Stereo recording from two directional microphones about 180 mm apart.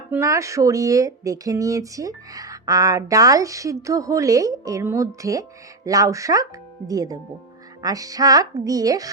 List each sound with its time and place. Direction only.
0.1 s speech: 15° right (ahead or behind)